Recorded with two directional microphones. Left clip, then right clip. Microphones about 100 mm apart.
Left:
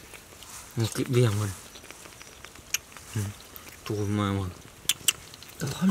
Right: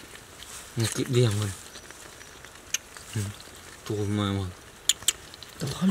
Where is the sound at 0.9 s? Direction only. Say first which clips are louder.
Even; 10° right (ahead or behind).